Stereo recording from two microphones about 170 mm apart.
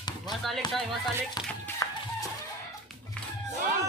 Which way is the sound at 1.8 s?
20° left (ahead or behind).